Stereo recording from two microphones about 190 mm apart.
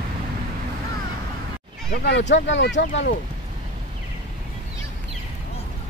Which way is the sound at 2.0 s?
70° left (ahead or behind).